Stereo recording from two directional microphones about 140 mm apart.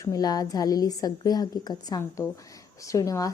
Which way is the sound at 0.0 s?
25° left (ahead or behind).